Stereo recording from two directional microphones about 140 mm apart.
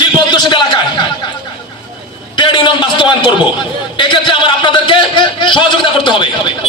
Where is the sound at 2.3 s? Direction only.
35° left (ahead or behind).